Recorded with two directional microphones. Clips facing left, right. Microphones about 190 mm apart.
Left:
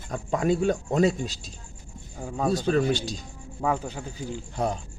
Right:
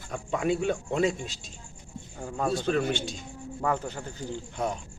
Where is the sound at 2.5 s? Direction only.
40° left (ahead or behind).